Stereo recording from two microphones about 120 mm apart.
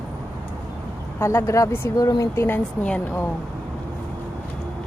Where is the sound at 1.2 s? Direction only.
20° left (ahead or behind).